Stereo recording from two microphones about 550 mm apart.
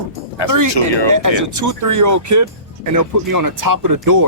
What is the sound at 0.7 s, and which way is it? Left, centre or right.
Speech, left.